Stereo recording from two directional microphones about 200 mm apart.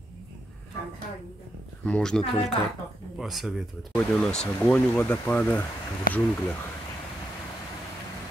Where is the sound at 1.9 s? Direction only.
5° left (ahead or behind).